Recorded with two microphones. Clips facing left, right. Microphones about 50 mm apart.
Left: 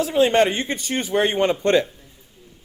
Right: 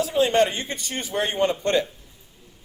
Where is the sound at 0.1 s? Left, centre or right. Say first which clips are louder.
Left 3 dB; left.